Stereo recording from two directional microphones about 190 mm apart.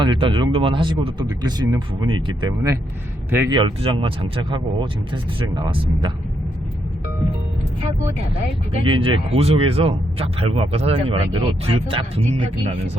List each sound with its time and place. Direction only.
0.0 s speech: 25° right (ahead or behind)
8.8 s speech: 30° right (ahead or behind)